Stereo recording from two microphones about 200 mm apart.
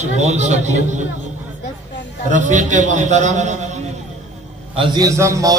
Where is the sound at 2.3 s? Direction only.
40° right (ahead or behind).